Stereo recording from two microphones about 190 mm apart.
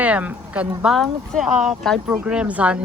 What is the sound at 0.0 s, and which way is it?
Speech, 10° right (ahead or behind).